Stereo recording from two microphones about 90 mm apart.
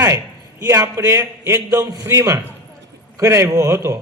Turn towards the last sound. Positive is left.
turn(degrees=-30)  # may be behind; listen again after turning